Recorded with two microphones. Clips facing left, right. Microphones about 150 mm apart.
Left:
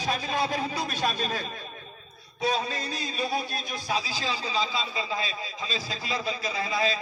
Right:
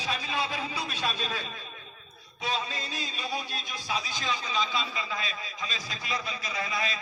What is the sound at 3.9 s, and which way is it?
A man's voice, 30° left (ahead or behind).